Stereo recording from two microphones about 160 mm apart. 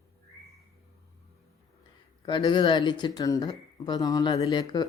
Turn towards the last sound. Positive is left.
turn(degrees=25)  # may be behind; listen again after turning